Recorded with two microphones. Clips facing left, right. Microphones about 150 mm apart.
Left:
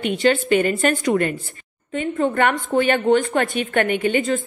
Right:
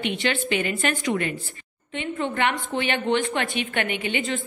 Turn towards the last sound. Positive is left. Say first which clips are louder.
# left 7 dB
turn(degrees=45)  # may be behind; listen again after turning